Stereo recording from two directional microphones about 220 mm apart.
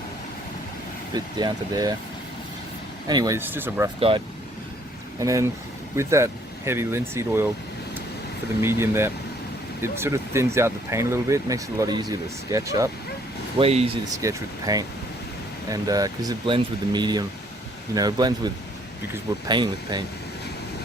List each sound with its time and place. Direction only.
1.1 s speech: 20° right (ahead or behind)
3.1 s speech: 15° right (ahead or behind)
4.1 s speech: 25° right (ahead or behind)
5.2 s speech: 15° right (ahead or behind)
8.6 s speech: 10° right (ahead or behind)
13.6 s speech: 25° right (ahead or behind)
14.2 s speech: 15° right (ahead or behind)